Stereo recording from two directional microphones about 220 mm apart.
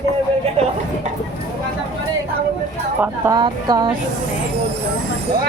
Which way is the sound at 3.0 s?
15° right (ahead or behind).